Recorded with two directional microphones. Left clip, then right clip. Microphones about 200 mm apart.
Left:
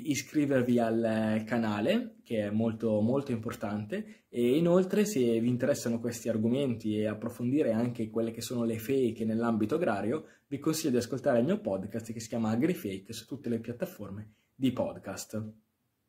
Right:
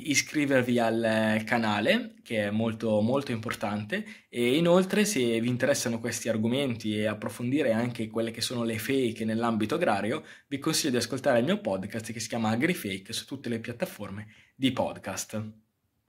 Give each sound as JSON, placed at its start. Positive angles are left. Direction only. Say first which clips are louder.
{"t": 0.0, "sound": "speech", "louder": "right 4 dB", "side_deg": 0}